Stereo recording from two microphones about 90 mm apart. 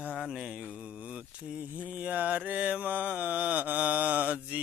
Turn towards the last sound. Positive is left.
turn(degrees=-15)  # may be behind; listen again after turning